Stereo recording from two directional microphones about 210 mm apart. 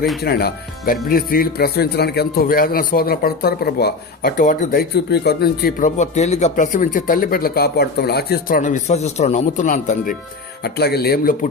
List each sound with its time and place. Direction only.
0.2 s a man's voice: 50° left (ahead or behind)
10.6 s a man's voice: 50° left (ahead or behind)